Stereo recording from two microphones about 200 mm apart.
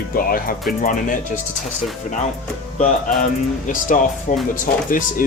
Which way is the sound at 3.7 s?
40° left (ahead or behind).